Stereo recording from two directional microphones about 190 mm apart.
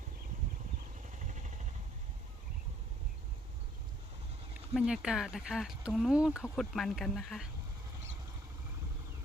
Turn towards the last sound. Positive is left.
turn(degrees=0)  # may be behind; listen again after turning